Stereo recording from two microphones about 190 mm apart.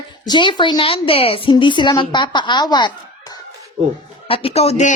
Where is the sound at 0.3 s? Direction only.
25° left (ahead or behind).